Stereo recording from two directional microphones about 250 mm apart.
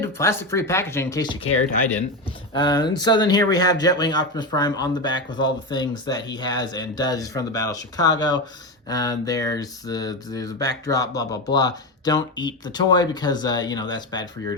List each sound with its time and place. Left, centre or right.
0.0 s speech: centre
2.5 s speech: centre